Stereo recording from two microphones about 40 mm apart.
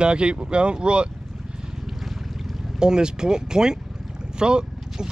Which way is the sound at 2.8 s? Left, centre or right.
Centre.